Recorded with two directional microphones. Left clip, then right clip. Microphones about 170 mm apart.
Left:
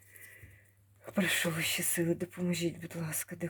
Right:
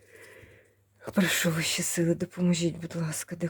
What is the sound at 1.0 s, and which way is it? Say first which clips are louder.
Speech: right 4 dB; 35° right (ahead or behind).